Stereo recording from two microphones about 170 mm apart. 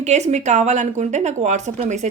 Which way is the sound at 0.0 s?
40° right (ahead or behind).